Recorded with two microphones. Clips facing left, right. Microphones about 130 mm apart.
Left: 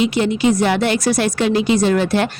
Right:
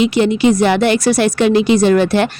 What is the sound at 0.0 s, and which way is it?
Speech, 70° right (ahead or behind).